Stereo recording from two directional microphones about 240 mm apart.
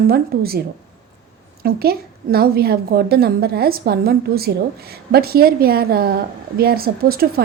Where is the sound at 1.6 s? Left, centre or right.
Right.